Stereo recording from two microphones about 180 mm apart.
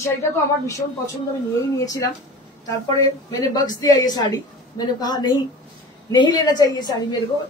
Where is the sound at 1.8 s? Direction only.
20° left (ahead or behind).